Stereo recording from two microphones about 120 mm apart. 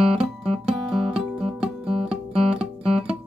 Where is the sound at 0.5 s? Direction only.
Centre (ahead or behind).